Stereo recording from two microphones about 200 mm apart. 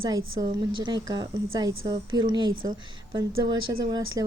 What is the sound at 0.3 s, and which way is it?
A woman's voice, 20° right (ahead or behind).